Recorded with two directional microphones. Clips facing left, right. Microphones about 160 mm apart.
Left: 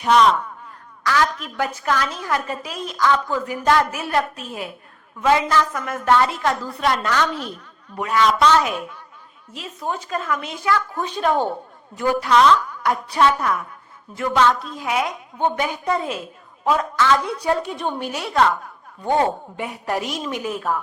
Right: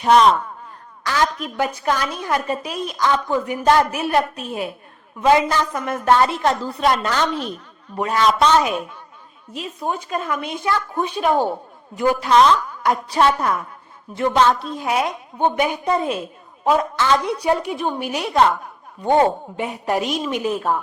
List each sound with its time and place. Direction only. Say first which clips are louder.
0.0 s speech: right 2 dB; 35° right (ahead or behind)
1.0 s a woman's voice: even; 25° right (ahead or behind)
11.1 s a woman's voice: right 1 dB; 10° right (ahead or behind); by 15.0 s 30° right (ahead or behind)
15.4 s a woman's voice: right 3 dB; 15° right (ahead or behind)
17.4 s a woman's voice: right 2 dB; 15° right (ahead or behind)
19.5 s a woman's voice: right 3 dB; 20° right (ahead or behind)